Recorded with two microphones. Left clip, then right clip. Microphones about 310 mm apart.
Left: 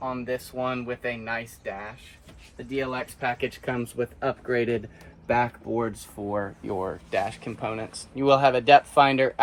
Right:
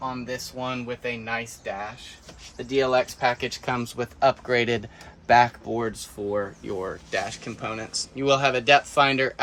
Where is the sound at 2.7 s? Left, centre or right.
Centre.